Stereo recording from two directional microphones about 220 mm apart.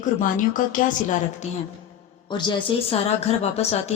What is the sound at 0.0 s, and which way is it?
A woman's voice, 35° left (ahead or behind).